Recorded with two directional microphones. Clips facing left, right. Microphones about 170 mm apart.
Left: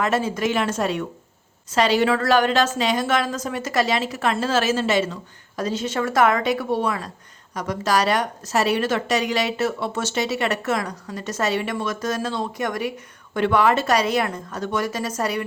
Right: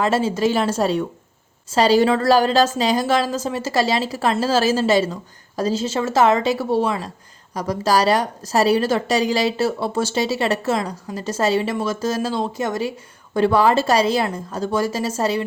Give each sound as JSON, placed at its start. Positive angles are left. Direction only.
{"t": 0.0, "sound": "a woman's voice", "side_deg": -30}